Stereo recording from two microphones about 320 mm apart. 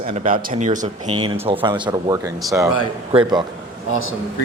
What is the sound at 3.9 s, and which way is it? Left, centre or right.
Speech, left.